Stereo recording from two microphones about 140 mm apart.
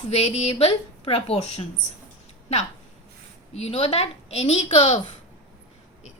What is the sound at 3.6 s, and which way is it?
A woman's voice, 45° left (ahead or behind).